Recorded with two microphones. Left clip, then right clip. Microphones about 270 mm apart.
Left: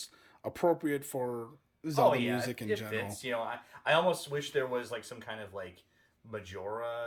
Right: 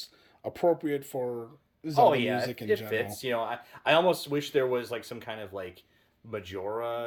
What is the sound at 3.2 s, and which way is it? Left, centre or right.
Speech, right.